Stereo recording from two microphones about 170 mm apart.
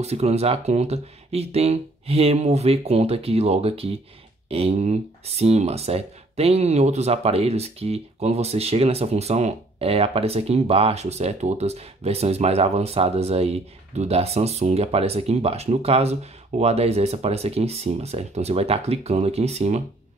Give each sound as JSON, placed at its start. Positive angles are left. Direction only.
{"t": 0.0, "sound": "speech", "side_deg": -40}